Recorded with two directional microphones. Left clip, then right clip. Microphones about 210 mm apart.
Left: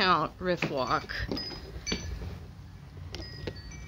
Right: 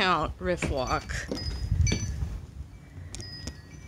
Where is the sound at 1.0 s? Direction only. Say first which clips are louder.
Even; 25° right (ahead or behind).